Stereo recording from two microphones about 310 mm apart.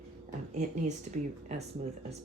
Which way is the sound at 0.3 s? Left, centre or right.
Right.